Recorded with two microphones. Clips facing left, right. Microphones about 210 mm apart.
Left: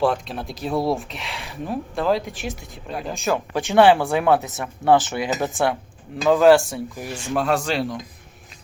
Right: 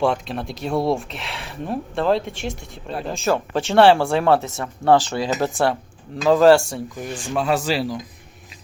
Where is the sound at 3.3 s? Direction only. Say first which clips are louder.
Right 2 dB; 15° left (ahead or behind).